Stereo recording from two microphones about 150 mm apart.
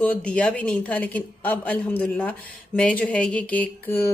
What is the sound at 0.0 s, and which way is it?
A woman's voice, 10° left (ahead or behind).